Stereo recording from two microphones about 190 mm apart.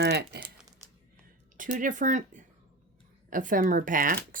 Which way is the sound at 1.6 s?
45° right (ahead or behind).